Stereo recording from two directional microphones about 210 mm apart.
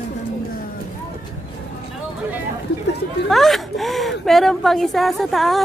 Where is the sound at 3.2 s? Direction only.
Centre (ahead or behind).